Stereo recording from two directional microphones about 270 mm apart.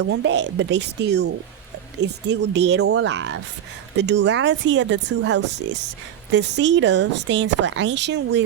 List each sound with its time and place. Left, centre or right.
0.0 s speech: right